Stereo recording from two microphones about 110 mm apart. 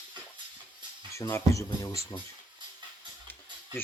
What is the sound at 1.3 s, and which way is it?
Speech, 30° left (ahead or behind).